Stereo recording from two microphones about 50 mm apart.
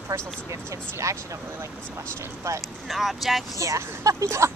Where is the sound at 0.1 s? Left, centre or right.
Right.